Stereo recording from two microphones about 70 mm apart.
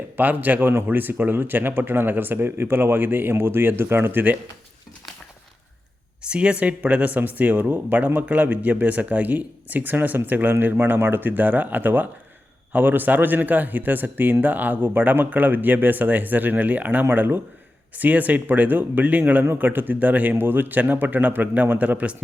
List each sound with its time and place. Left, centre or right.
0.2 s speech: right
6.2 s speech: centre